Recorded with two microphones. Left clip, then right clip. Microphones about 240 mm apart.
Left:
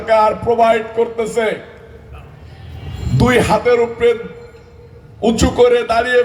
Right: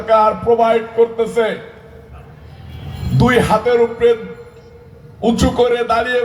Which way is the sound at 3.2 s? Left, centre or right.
Left.